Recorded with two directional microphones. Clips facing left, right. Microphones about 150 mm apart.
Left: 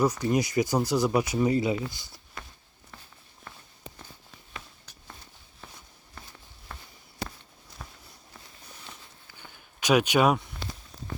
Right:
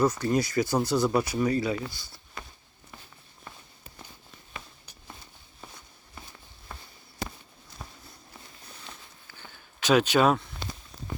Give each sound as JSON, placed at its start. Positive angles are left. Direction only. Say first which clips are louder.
{"t": 0.0, "sound": "speech", "louder": "even", "side_deg": 10}
{"t": 6.2, "sound": "walk", "louder": "right 1 dB", "side_deg": -5}
{"t": 6.7, "sound": "a sound", "louder": "even", "side_deg": -10}
{"t": 9.8, "sound": "speech", "louder": "even", "side_deg": 15}